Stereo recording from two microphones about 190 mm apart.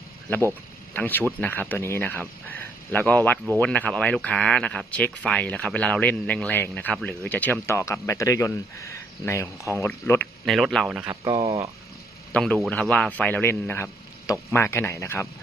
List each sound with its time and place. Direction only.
0.9 s speech: 10° left (ahead or behind)
10.4 s speech: centre (ahead or behind)
11.1 s speech: 20° right (ahead or behind)
12.3 s speech: 5° left (ahead or behind)